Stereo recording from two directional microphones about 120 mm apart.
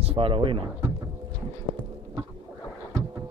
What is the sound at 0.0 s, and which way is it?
Speech, 50° right (ahead or behind).